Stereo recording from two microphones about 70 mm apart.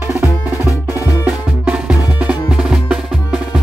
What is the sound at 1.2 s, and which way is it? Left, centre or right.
Music, centre.